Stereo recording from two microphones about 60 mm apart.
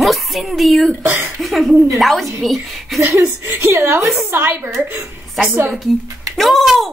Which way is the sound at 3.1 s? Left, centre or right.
Right.